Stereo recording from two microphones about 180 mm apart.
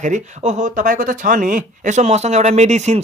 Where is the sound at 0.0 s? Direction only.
40° right (ahead or behind).